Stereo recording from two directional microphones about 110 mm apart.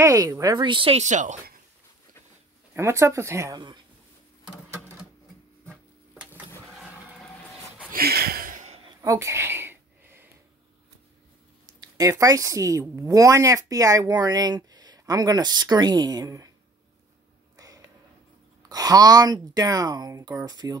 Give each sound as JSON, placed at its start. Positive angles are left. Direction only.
{"t": 0.0, "sound": "speech", "side_deg": -30}
{"t": 0.6, "sound": "speech", "side_deg": -50}
{"t": 0.9, "sound": "speech", "side_deg": -90}
{"t": 2.7, "sound": "speech", "side_deg": -25}
{"t": 3.5, "sound": "speech", "side_deg": -40}
{"t": 9.0, "sound": "a sound", "side_deg": -30}
{"t": 11.6, "sound": "speech", "side_deg": -30}
{"t": 17.6, "sound": "a sound", "side_deg": -35}
{"t": 18.7, "sound": "speech", "side_deg": -35}